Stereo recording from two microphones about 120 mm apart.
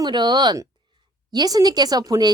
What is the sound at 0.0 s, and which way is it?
Speech, 40° right (ahead or behind).